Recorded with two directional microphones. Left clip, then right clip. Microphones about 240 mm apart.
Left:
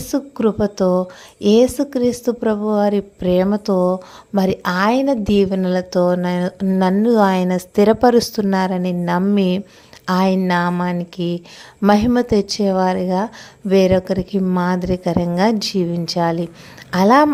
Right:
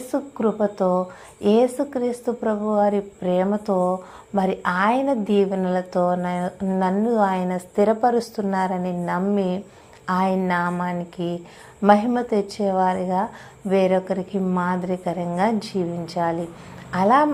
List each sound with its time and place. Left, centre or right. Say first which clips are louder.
0.1 s a woman's voice: left 4 dB; left